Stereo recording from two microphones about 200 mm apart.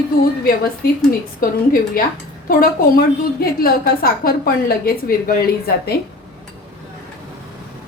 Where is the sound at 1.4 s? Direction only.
45° left (ahead or behind).